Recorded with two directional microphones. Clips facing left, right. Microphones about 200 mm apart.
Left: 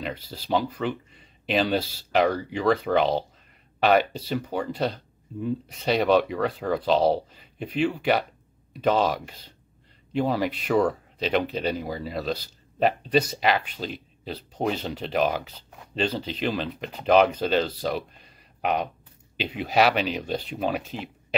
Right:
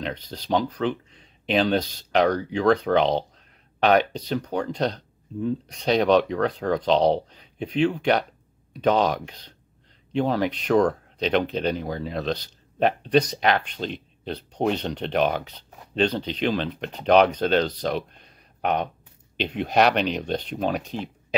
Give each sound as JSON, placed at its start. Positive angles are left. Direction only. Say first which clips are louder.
{"t": 0.0, "sound": "speech", "louder": "right 2 dB", "side_deg": 5}